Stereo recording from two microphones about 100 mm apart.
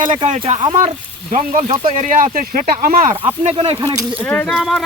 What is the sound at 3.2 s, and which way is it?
Speech, 70° right (ahead or behind).